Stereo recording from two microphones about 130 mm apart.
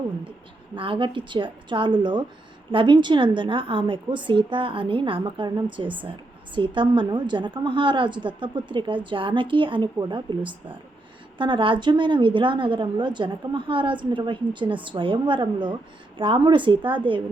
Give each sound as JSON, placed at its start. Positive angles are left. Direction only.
{"t": 0.8, "sound": "a woman's voice", "side_deg": -40}